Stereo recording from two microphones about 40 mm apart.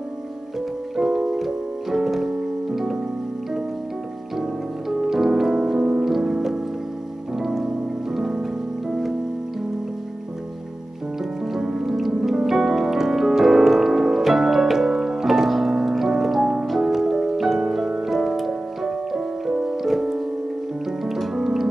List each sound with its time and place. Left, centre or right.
0.9 s piano: centre
4.4 s music: centre
11.5 s music: centre
16.6 s piano: centre
17.4 s music: centre
19.6 s piano: centre
21.0 s music: centre